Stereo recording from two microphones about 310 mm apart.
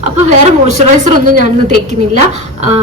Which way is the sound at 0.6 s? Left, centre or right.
Right.